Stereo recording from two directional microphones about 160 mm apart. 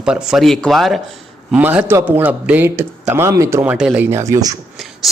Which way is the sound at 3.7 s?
5° right (ahead or behind).